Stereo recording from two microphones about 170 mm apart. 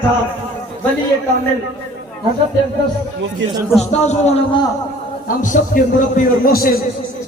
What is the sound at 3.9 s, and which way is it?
A man's voice, 40° left (ahead or behind).